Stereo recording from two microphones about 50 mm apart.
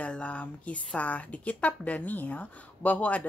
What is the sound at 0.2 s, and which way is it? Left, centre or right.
A woman's voice, left.